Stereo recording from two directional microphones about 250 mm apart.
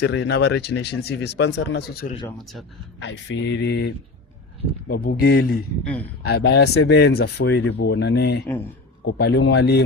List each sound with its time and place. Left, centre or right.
0.0 s speech: left
2.4 s speech: centre
3.0 s speech: left
5.8 s speech: centre
6.2 s speech: left